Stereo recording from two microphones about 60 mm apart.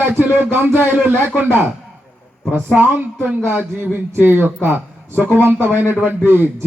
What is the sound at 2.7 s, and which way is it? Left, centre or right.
A man's voice, right.